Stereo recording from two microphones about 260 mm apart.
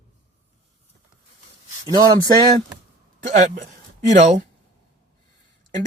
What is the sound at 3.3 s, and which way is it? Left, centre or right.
Speech, right.